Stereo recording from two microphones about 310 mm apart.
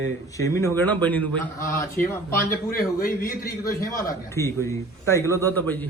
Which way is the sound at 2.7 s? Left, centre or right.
Left.